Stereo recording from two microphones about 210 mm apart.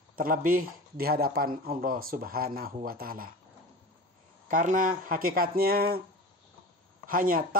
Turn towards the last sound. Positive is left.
turn(degrees=-40)  # may be behind; listen again after turning